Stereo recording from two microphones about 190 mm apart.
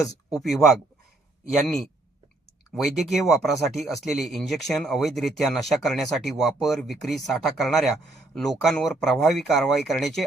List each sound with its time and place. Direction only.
0.0 s speech: 20° left (ahead or behind)
0.4 s speech: centre (ahead or behind)
2.7 s speech: centre (ahead or behind)